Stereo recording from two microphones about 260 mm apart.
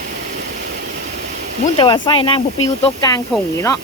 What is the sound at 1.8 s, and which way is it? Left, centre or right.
Speech, centre.